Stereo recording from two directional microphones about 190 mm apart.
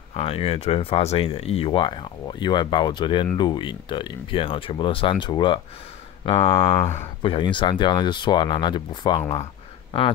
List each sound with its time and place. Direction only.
0.1 s speech: 30° left (ahead or behind)